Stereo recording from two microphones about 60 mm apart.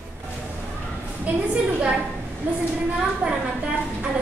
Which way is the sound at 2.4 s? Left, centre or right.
Right.